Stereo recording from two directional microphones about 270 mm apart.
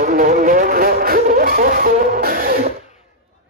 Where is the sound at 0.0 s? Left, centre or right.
Right.